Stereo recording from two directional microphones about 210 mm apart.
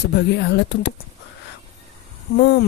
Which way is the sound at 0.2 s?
55° left (ahead or behind).